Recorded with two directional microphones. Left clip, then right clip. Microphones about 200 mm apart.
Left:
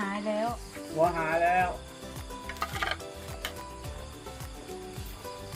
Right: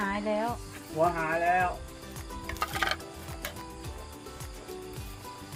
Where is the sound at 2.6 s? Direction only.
30° right (ahead or behind).